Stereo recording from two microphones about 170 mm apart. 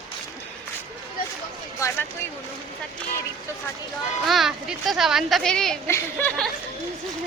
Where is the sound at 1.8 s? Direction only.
20° left (ahead or behind).